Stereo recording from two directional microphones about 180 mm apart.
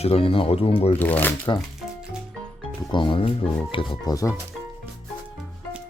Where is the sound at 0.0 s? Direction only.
30° left (ahead or behind).